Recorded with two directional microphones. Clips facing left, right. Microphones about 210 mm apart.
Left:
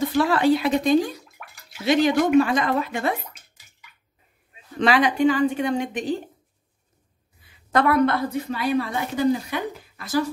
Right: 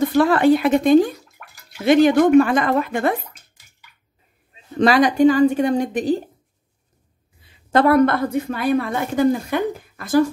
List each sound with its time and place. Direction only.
0.0 s speech: 55° right (ahead or behind)
1.4 s bathtub: centre (ahead or behind)
1.9 s a woman's voice: 55° right (ahead or behind)
4.7 s speech: 40° right (ahead or behind)
7.4 s a sound: 35° right (ahead or behind)
8.0 s a woman's voice: 50° right (ahead or behind)